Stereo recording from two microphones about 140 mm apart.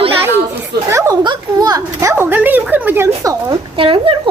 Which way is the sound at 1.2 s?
30° right (ahead or behind).